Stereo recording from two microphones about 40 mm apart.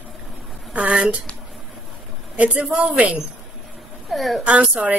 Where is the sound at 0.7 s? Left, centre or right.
Right.